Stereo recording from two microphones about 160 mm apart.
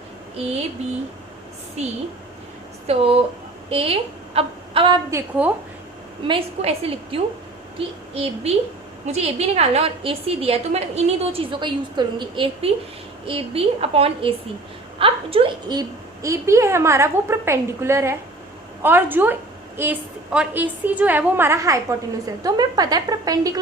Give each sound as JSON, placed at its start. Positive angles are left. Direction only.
{"t": 1.8, "sound": "a woman's voice", "side_deg": -40}
{"t": 4.4, "sound": "a sound", "side_deg": -35}
{"t": 5.4, "sound": "a woman's voice", "side_deg": -10}
{"t": 6.2, "sound": "a woman's voice", "side_deg": -35}